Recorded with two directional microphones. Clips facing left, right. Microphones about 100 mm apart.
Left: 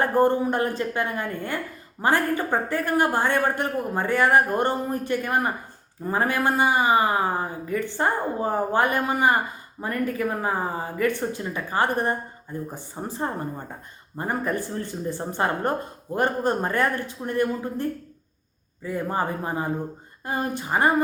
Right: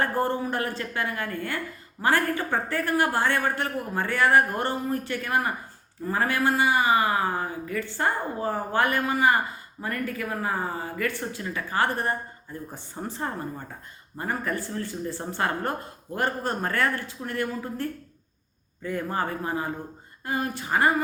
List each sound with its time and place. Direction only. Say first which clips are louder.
0.0 s speech: left 5 dB; 20° left (ahead or behind)